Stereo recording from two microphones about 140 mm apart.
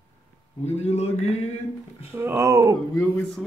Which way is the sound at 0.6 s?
50° left (ahead or behind).